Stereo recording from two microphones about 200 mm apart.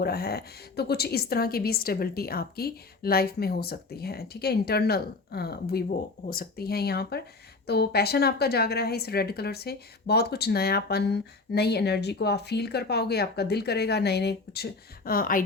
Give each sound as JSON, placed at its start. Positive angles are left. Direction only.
{"t": 0.0, "sound": "a woman's voice", "side_deg": 50}